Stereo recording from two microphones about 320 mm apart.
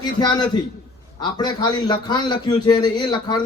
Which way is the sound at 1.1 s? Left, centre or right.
Centre.